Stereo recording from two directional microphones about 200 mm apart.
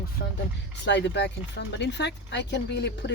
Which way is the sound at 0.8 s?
60° left (ahead or behind).